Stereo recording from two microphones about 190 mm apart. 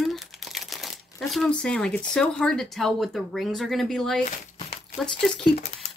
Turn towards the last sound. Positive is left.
turn(degrees=0)  # may be behind; listen again after turning